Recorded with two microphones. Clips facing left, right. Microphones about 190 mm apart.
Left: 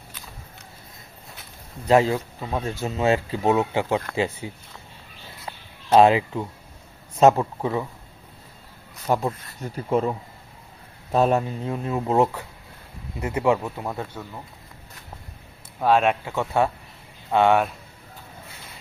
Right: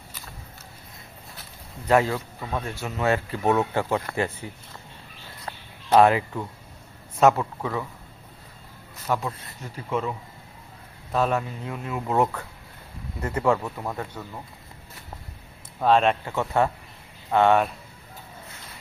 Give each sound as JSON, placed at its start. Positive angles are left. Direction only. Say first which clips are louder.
{"t": 1.9, "sound": "speech", "louder": "left 3 dB", "side_deg": 20}
{"t": 5.5, "sound": "a sound", "louder": "left 2 dB", "side_deg": 15}
{"t": 7.2, "sound": "speech", "louder": "left 3 dB", "side_deg": 25}
{"t": 9.0, "sound": "speech", "louder": "left 4 dB", "side_deg": 35}
{"t": 15.8, "sound": "speech", "louder": "even", "side_deg": 5}